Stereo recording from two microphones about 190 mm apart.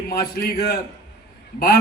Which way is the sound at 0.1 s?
55° left (ahead or behind).